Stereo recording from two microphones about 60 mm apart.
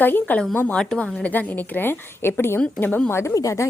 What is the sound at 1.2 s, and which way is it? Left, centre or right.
A woman's voice, left.